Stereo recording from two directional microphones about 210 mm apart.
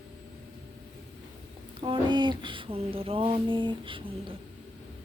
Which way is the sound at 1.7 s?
25° right (ahead or behind).